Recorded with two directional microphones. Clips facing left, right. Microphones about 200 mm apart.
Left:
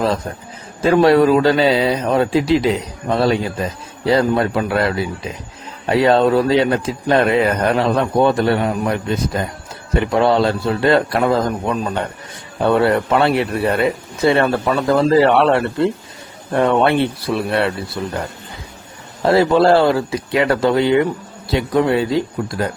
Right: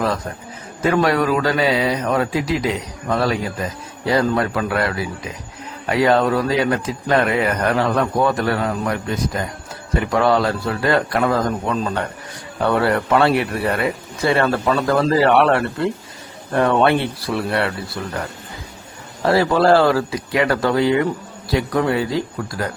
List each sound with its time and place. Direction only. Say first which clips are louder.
1.0 s a man's voice: left 6 dB; 30° left (ahead or behind)
11.7 s a man's voice: left 1 dB; 15° left (ahead or behind)
19.2 s a man's voice: left 3 dB; 25° left (ahead or behind)